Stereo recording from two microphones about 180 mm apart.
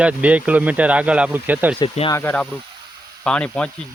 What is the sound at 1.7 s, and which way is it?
Speech, 30° left (ahead or behind).